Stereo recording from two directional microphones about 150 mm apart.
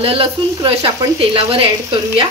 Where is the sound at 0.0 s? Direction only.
35° right (ahead or behind).